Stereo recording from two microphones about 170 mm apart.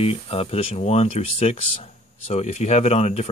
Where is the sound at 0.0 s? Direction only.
35° left (ahead or behind).